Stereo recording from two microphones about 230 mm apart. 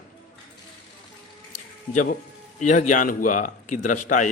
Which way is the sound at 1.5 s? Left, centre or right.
Left.